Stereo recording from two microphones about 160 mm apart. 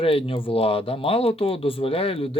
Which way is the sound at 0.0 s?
35° left (ahead or behind).